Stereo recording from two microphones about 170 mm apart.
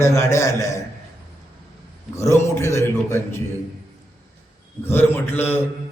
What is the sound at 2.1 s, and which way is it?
A man's voice, 15° left (ahead or behind).